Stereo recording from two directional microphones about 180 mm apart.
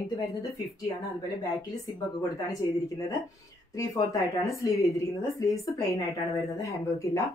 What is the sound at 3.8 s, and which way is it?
A woman's voice, 20° left (ahead or behind).